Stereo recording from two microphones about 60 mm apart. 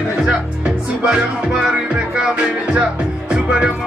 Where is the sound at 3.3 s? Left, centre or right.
Centre.